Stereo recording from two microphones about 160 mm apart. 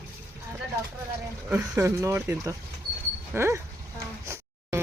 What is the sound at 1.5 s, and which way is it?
Speech, 10° right (ahead or behind).